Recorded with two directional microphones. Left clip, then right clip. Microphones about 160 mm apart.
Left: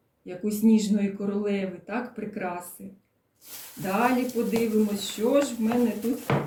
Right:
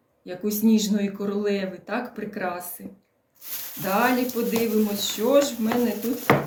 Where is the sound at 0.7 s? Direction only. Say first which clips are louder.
Even; 15° left (ahead or behind).